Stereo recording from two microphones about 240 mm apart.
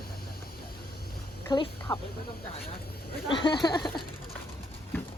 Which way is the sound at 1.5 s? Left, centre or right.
Centre.